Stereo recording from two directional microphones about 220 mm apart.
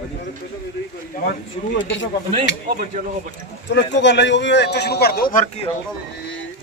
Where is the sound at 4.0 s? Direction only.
55° left (ahead or behind); by 5.7 s 35° left (ahead or behind).